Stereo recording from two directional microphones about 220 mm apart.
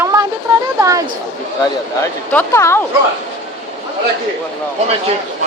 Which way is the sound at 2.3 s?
10° left (ahead or behind).